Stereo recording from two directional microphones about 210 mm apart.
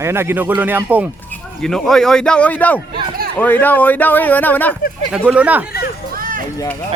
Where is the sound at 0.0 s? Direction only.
10° right (ahead or behind).